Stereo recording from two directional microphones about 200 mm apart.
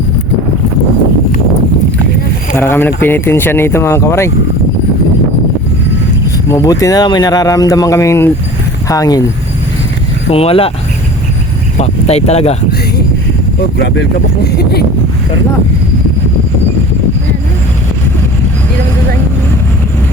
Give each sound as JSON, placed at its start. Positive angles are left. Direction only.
{"t": 2.6, "sound": "speech", "side_deg": 10}
{"t": 6.5, "sound": "speech", "side_deg": 15}
{"t": 10.2, "sound": "speech", "side_deg": 30}
{"t": 11.8, "sound": "speech", "side_deg": 30}
{"t": 13.7, "sound": "speech", "side_deg": 60}